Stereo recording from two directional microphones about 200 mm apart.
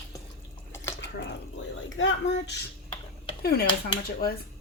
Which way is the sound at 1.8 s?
70° left (ahead or behind).